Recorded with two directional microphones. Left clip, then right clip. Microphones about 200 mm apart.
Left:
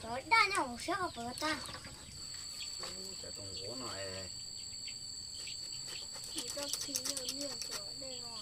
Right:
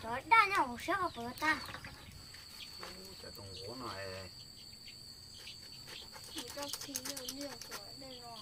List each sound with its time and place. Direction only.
0.1 s a child's voice: 5° left (ahead or behind)
3.8 s speech: 5° right (ahead or behind)
6.7 s a child's voice: 5° right (ahead or behind)